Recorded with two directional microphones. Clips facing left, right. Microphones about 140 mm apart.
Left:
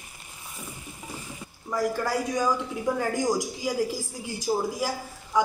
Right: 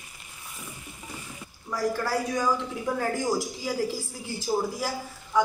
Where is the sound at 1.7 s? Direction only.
20° left (ahead or behind).